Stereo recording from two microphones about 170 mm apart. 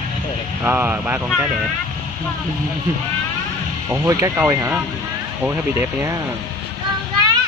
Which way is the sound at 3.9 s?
15° right (ahead or behind).